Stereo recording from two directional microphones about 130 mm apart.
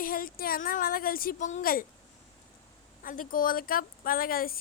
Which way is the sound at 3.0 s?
90° left.